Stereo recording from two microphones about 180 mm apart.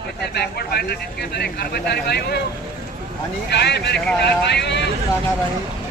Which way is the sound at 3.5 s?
70° left (ahead or behind).